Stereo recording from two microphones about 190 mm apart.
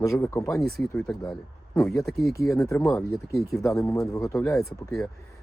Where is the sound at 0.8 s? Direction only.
Centre (ahead or behind).